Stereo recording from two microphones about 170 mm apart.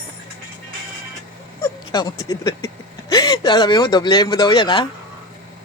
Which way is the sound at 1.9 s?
20° left (ahead or behind).